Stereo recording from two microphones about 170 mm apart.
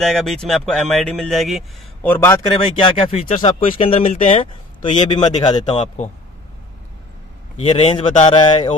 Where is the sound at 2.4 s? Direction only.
30° left (ahead or behind).